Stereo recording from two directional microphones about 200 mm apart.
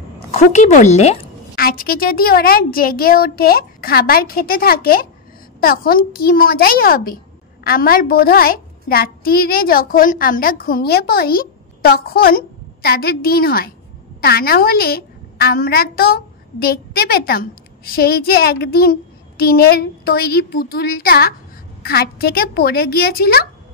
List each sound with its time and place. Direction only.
0.3 s speech: 35° left (ahead or behind)
1.5 s a child's voice: 50° left (ahead or behind)